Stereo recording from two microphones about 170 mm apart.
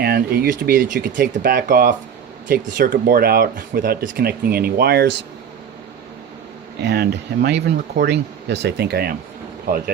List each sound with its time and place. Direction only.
0.0 s speech: 65° right (ahead or behind)
6.8 s speech: 75° right (ahead or behind)